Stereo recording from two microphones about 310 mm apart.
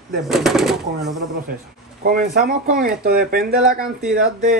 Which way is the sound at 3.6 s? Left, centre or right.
Centre.